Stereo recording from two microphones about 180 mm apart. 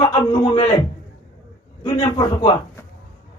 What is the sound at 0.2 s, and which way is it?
Speech, 25° left (ahead or behind).